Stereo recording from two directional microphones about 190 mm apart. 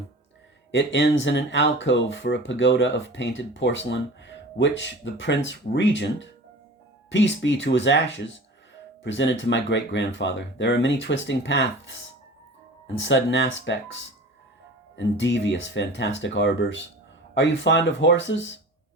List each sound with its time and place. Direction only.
0.7 s speech: 70° left (ahead or behind)
13.0 s speech: 70° left (ahead or behind)